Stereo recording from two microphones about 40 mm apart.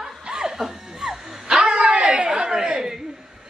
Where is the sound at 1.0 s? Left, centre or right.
Centre.